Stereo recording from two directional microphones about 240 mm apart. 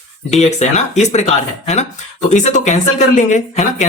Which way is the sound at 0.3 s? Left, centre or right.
Left.